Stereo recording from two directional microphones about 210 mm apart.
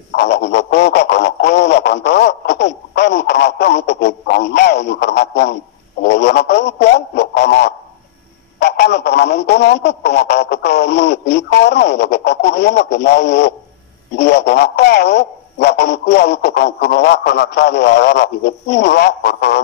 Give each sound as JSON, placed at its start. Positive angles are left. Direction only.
{"t": 0.1, "sound": "a sound", "side_deg": 50}
{"t": 8.5, "sound": "telephone", "side_deg": 55}
{"t": 14.1, "sound": "a man's voice", "side_deg": 55}